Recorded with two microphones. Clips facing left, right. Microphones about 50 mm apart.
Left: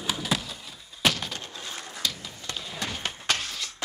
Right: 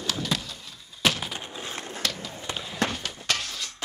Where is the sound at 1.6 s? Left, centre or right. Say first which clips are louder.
Right 2 dB; right.